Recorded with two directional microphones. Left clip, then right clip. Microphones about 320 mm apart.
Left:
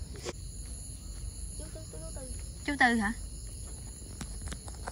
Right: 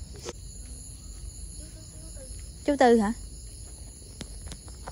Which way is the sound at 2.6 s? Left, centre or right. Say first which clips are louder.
Right 6 dB; right.